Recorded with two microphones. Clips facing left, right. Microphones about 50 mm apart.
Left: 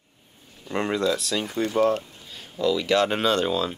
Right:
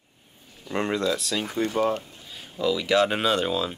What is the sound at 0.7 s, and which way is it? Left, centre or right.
Speech, centre.